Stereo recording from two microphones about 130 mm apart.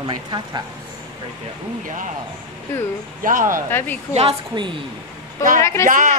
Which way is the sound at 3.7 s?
15° left (ahead or behind).